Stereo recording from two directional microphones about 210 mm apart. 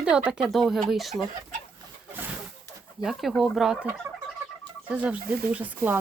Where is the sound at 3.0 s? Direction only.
Centre (ahead or behind).